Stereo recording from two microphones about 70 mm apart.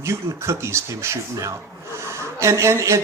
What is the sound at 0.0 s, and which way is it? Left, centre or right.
A man's voice, right.